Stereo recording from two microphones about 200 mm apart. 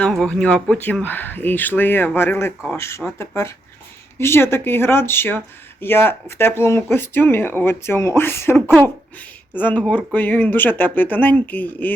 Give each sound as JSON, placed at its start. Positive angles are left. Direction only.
{"t": 0.0, "sound": "speech", "side_deg": 5}